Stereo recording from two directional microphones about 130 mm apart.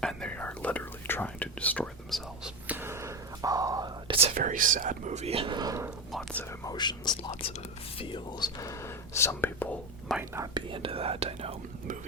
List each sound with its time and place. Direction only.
0.0 s whispering: 5° left (ahead or behind)
2.6 s whispering: 15° right (ahead or behind)
4.4 s speech: 90° right; by 5.5 s 45° right (ahead or behind)
5.5 s speech: 25° right (ahead or behind)
6.7 s speech: 35° left (ahead or behind)
7.2 s speech: 50° left (ahead or behind)
7.9 s speech: 40° left (ahead or behind); by 9.7 s 15° left (ahead or behind)
10.4 s speech: 35° right (ahead or behind)